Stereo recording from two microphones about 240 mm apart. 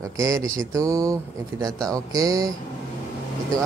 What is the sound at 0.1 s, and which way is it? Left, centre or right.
Speech, centre.